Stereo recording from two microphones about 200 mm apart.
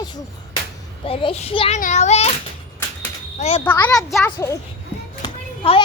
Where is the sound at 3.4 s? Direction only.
35° left (ahead or behind).